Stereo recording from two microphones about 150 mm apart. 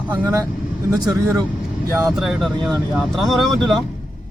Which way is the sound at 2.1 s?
Centre (ahead or behind).